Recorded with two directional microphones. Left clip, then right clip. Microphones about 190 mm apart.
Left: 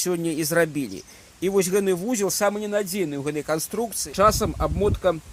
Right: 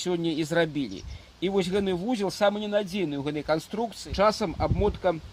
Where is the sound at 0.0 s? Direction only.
30° left (ahead or behind).